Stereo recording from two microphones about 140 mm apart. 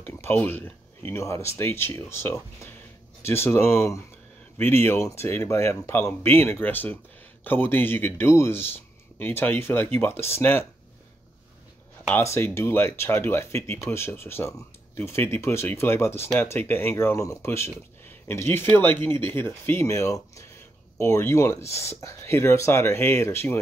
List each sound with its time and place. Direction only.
0.0 s speech: 15° left (ahead or behind)
12.1 s speech: 15° left (ahead or behind)